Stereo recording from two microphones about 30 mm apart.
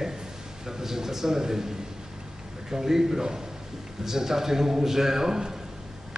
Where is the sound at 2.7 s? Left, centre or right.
Centre.